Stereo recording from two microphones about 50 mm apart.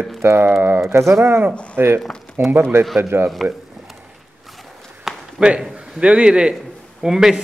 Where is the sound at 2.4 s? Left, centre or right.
Right.